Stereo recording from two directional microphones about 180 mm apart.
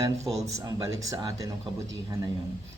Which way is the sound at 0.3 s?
15° right (ahead or behind).